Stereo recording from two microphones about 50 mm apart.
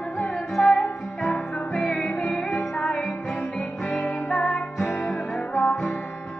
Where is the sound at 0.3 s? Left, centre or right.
Centre.